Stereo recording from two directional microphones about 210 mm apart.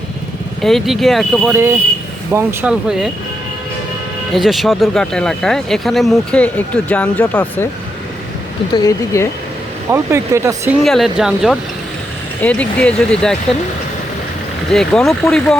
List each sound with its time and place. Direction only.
0.6 s speech: centre (ahead or behind)
2.3 s speech: 10° right (ahead or behind)
4.4 s speech: centre (ahead or behind)
8.7 s speech: 15° left (ahead or behind)
9.9 s speech: 15° right (ahead or behind)
10.8 s speech: centre (ahead or behind)
14.7 s speech: centre (ahead or behind)